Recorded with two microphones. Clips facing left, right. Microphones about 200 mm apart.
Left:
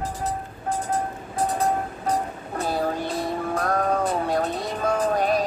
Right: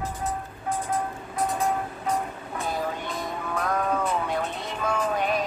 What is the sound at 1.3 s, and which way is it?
Music, 35° left (ahead or behind).